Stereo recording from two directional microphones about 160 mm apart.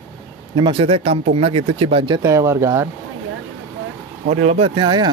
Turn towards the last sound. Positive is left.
turn(degrees=-25)  # may be behind; listen again after turning